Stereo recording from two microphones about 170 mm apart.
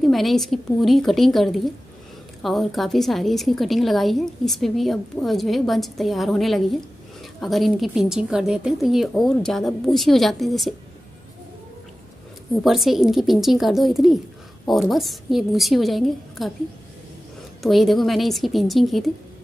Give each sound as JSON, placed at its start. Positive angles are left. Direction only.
{"t": 0.0, "sound": "a woman's voice", "side_deg": 0}
{"t": 12.6, "sound": "a woman's voice", "side_deg": 0}
{"t": 17.6, "sound": "a woman's voice", "side_deg": 0}